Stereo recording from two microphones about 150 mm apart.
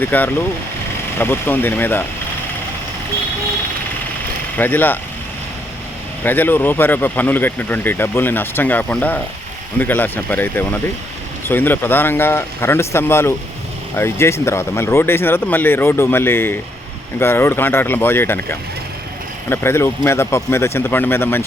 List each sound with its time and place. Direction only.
0.0 s speech: 10° left (ahead or behind)
4.5 s speech: 15° left (ahead or behind)
6.2 s speech: 15° left (ahead or behind)
19.5 s speech: 15° left (ahead or behind)